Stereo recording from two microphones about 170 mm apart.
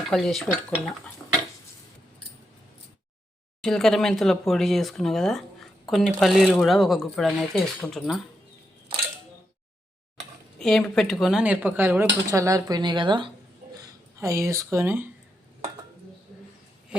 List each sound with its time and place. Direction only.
0.1 s speech: centre (ahead or behind)
3.6 s speech: 5° left (ahead or behind)
10.6 s speech: centre (ahead or behind); by 13.3 s 30° right (ahead or behind)
13.7 s a sound: 15° right (ahead or behind)
14.7 s speech: 15° right (ahead or behind)